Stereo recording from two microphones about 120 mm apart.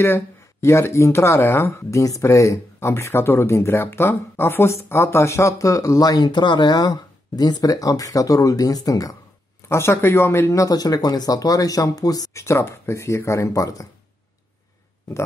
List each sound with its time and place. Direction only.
0.0 s speech: 20° left (ahead or behind)